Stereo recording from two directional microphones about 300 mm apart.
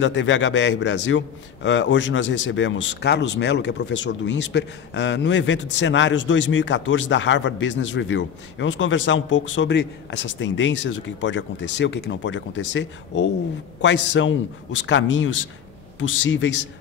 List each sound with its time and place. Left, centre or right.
0.0 s a man's voice: left